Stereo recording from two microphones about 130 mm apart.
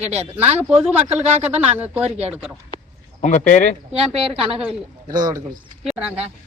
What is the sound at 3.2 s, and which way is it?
Speech, 75° left (ahead or behind).